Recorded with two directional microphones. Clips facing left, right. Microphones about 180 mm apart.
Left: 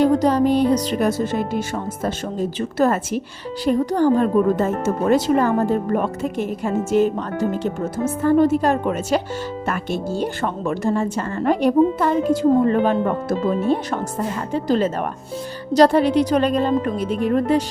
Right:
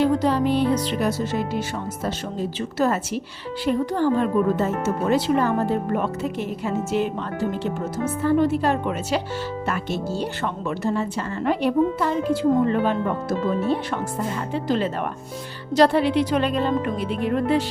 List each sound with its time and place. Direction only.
0.0 s a woman's voice: 40° left (ahead or behind)